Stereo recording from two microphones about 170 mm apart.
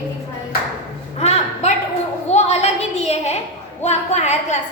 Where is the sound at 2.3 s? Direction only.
40° left (ahead or behind).